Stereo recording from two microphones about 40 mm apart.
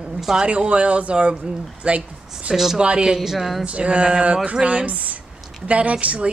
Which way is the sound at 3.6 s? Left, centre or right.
Right.